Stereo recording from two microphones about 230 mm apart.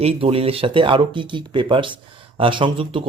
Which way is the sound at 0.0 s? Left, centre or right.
Right.